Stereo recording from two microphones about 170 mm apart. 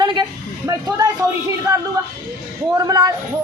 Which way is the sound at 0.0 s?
25° right (ahead or behind).